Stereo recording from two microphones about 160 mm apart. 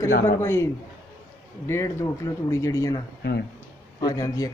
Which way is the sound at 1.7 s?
20° left (ahead or behind).